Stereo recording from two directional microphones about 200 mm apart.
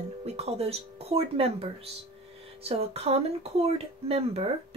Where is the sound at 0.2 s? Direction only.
30° right (ahead or behind).